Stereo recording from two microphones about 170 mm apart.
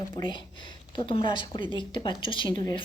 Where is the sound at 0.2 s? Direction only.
25° left (ahead or behind).